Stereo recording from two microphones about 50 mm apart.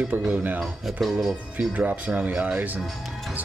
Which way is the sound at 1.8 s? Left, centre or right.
Right.